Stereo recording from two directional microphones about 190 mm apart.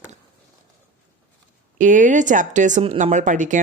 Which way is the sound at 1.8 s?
45° right (ahead or behind).